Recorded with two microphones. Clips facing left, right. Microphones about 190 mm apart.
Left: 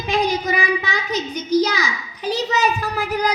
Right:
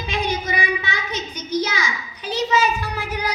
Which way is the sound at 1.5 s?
40° left (ahead or behind).